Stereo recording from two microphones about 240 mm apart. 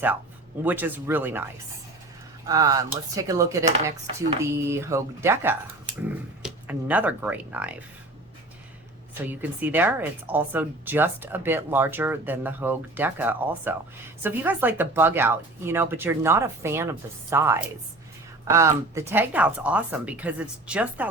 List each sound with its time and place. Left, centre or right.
0.6 s speech: centre
2.5 s speech: centre
9.2 s speech: centre